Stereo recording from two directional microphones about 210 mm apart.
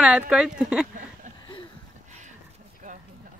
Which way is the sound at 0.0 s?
5° right (ahead or behind).